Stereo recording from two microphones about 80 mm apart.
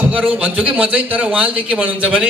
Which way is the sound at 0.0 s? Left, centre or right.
Centre.